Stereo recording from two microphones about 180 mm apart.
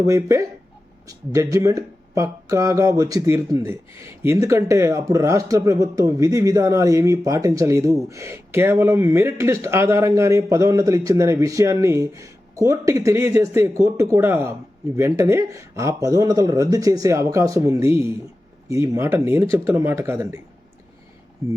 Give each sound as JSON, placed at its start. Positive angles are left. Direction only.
{"t": 0.0, "sound": "speech", "side_deg": -15}
{"t": 21.4, "sound": "speech", "side_deg": -15}